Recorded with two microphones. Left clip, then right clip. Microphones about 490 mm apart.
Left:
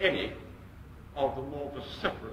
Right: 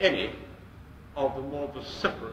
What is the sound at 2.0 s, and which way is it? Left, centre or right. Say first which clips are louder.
Speech: right 4 dB; right.